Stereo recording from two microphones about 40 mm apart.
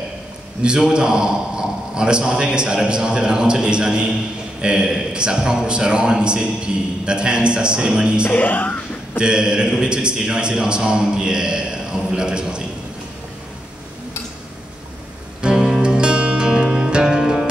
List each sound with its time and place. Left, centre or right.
0.7 s a man's voice: centre
8.3 s speech: left
9.2 s a man's voice: right
15.4 s music: centre